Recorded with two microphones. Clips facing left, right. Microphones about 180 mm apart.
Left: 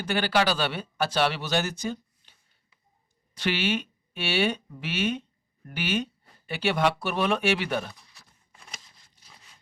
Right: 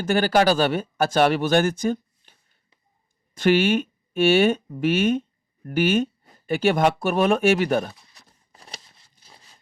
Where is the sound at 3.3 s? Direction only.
50° right (ahead or behind).